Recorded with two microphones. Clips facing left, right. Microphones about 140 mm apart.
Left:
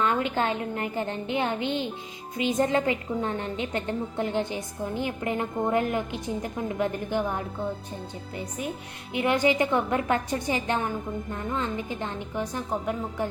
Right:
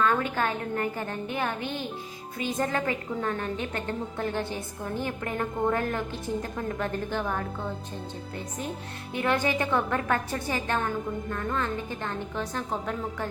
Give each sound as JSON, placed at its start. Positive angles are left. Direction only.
{"t": 0.0, "sound": "a sound", "side_deg": 20}
{"t": 0.3, "sound": "a woman's voice", "side_deg": 20}
{"t": 9.1, "sound": "a woman's voice", "side_deg": 15}